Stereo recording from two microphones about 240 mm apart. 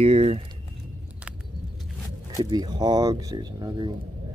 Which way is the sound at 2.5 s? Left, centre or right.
Centre.